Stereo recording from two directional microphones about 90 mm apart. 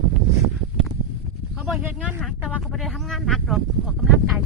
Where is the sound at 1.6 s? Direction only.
5° right (ahead or behind).